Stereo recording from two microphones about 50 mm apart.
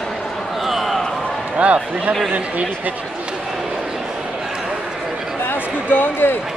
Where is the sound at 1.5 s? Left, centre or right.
Right.